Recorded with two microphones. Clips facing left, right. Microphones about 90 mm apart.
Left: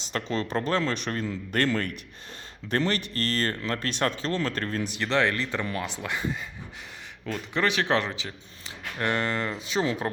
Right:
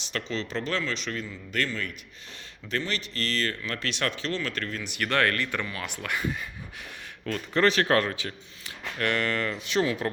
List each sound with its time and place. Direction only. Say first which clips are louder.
0.3 s a man's voice: left 4 dB; 45° left (ahead or behind)
4.9 s speech: even; 20° left (ahead or behind)
5.6 s speech: left 4 dB; 40° left (ahead or behind)
6.0 s speech: even; 25° left (ahead or behind)
7.3 s speech: right 3 dB; 10° left (ahead or behind)